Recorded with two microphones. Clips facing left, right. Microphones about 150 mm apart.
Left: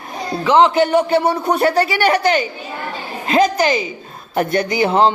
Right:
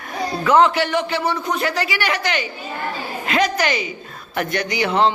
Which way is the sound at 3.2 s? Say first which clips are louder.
Left 5 dB; 30° left (ahead or behind).